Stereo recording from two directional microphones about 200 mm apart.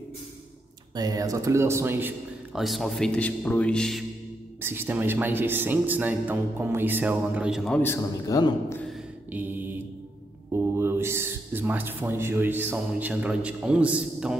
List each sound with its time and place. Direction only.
0.9 s a man's voice: 20° right (ahead or behind); by 4.0 s 5° left (ahead or behind)
4.6 s speech: 10° right (ahead or behind)
7.8 s a man's voice: 15° left (ahead or behind)
8.7 s a sound: centre (ahead or behind)
9.3 s mantra: 10° right (ahead or behind)
10.5 s a man's voice: 10° right (ahead or behind)